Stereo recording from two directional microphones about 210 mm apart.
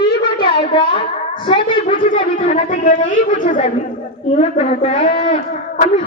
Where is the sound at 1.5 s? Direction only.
25° left (ahead or behind).